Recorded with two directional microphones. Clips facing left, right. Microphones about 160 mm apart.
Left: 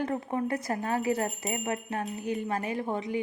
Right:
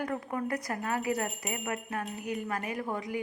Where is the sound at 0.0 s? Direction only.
25° left (ahead or behind).